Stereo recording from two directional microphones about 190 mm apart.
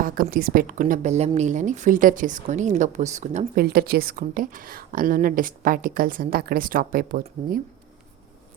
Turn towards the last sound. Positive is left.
turn(degrees=-50)  # may be behind; listen again after turning